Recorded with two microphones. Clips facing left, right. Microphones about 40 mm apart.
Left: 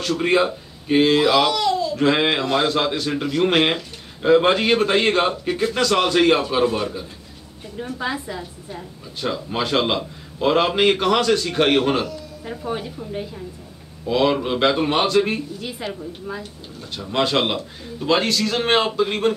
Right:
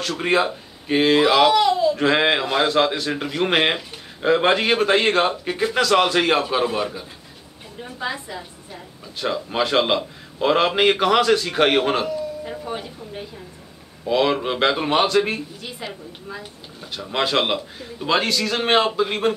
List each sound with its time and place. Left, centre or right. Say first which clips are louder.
0.0 s a man's voice: left 2 dB; centre; by 2.0 s right
2.0 s a man's voice: even; centre